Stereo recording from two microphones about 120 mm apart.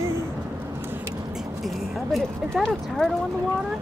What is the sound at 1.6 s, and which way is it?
Speech, centre (ahead or behind).